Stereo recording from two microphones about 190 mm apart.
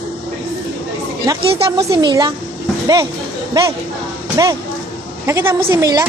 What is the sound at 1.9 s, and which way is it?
Speech, 20° right (ahead or behind).